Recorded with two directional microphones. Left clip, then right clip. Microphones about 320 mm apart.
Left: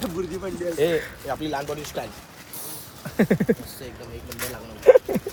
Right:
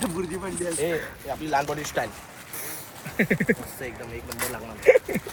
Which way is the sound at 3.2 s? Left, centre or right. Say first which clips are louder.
Left 2 dB; centre.